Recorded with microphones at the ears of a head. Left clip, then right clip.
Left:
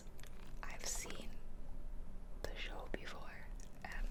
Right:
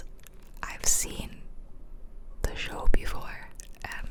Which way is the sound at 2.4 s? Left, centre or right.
Right.